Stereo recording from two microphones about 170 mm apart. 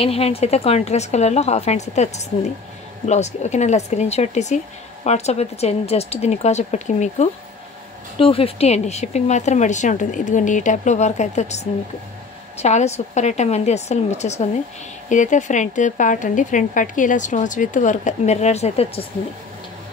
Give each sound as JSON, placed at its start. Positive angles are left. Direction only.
{"t": 0.0, "sound": "a woman's voice", "side_deg": 35}
{"t": 8.2, "sound": "a woman's voice", "side_deg": 35}